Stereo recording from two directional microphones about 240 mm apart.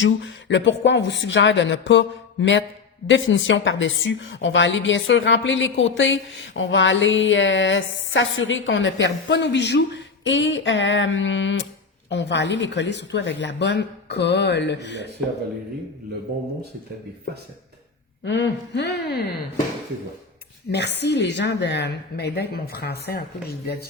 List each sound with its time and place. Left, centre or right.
0.0 s a woman's voice: left
18.3 s a woman's voice: left
20.7 s a woman's voice: left